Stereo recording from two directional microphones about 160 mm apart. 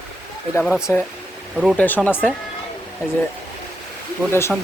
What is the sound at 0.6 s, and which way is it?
Speech, 5° right (ahead or behind).